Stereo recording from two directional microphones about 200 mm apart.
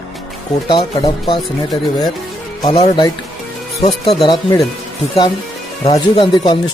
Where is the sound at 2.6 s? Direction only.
20° left (ahead or behind).